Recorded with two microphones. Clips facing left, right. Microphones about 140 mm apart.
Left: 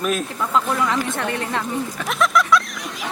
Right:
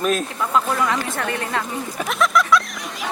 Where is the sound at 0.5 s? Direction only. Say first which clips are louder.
Even; 10° right (ahead or behind).